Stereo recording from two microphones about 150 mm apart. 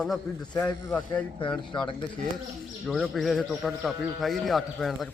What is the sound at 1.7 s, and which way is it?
Speech, 30° left (ahead or behind).